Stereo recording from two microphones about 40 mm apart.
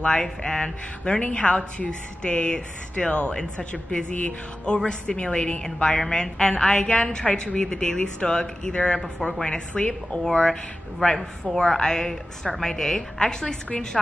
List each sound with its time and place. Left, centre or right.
0.2 s a woman's voice: centre; by 4.4 s left
4.8 s a woman's voice: left
10.2 s speech: centre